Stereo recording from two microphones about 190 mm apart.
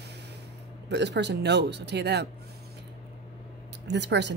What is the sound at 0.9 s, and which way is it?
A woman's voice, 65° right (ahead or behind).